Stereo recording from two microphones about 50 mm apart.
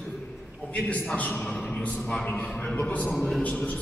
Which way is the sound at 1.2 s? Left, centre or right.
Left.